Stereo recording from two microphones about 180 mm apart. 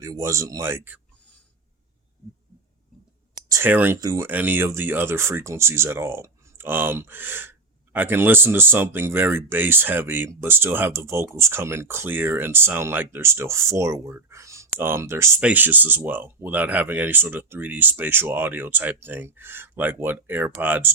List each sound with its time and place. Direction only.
0.0 s speech: 15° right (ahead or behind)
3.5 s speech: 10° right (ahead or behind)